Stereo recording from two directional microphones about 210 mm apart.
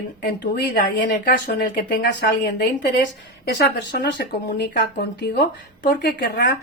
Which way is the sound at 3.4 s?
50° left (ahead or behind).